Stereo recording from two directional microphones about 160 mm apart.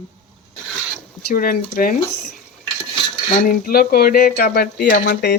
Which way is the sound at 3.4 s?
65° left (ahead or behind).